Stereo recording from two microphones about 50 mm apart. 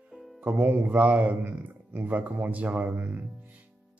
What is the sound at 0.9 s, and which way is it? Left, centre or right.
Speech, right.